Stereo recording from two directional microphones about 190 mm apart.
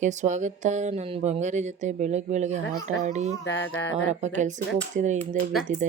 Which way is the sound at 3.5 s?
80° left.